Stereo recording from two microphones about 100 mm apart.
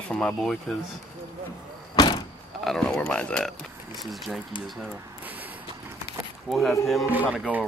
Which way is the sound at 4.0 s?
Centre (ahead or behind).